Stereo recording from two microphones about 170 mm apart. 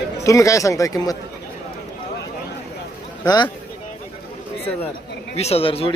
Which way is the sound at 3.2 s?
25° left (ahead or behind).